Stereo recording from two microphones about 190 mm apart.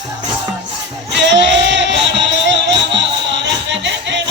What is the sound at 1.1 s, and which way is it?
Music, 65° right (ahead or behind).